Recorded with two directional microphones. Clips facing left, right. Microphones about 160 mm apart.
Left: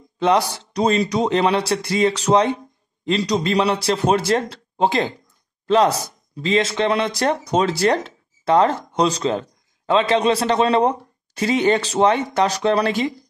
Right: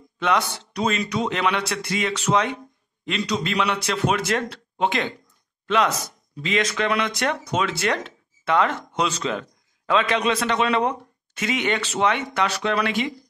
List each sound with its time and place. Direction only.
0.2 s speech: 35° left (ahead or behind)